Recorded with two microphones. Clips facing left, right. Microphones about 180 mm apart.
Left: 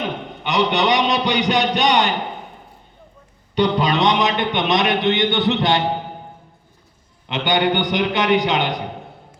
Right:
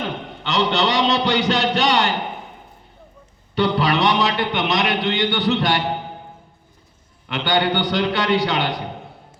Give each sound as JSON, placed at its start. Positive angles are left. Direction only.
{"t": 0.0, "sound": "a man's voice", "side_deg": 15}
{"t": 3.5, "sound": "speech", "side_deg": 20}
{"t": 7.3, "sound": "speech", "side_deg": 20}